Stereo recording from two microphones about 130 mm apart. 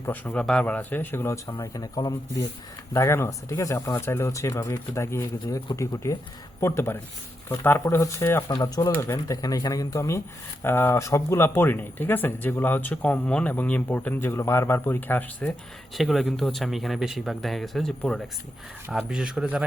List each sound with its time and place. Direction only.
0.0 s speech: 20° left (ahead or behind)
0.3 s speech: 10° left (ahead or behind); by 1.9 s 25° left (ahead or behind)
2.9 s speech: 20° left (ahead or behind)
8.4 s speech: 30° left (ahead or behind); by 15.4 s 15° left (ahead or behind)
16.0 s speech: centre (ahead or behind)